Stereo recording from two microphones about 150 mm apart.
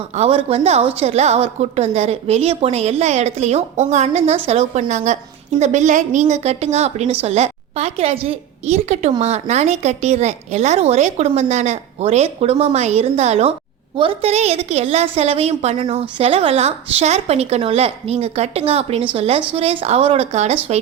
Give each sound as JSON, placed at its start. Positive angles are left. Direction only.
{"t": 0.2, "sound": "a woman's voice", "side_deg": -40}
{"t": 13.9, "sound": "a woman's voice", "side_deg": -35}